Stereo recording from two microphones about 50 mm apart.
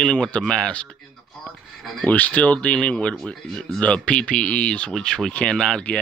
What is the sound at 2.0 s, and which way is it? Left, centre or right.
Speech, left.